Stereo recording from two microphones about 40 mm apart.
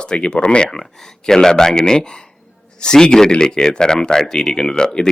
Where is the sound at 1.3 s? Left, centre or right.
Centre.